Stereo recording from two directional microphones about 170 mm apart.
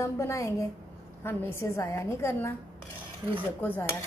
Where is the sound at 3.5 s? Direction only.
10° left (ahead or behind).